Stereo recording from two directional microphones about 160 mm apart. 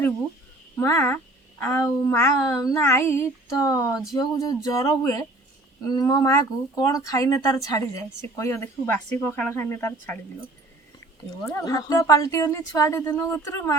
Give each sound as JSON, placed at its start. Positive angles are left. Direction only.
{"t": 0.8, "sound": "speech", "side_deg": 15}
{"t": 1.6, "sound": "child singing", "side_deg": 15}
{"t": 5.9, "sound": "speech", "side_deg": 25}
{"t": 11.0, "sound": "child singing", "side_deg": 20}